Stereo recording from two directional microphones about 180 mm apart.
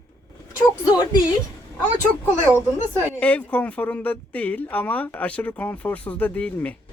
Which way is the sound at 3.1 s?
10° left (ahead or behind).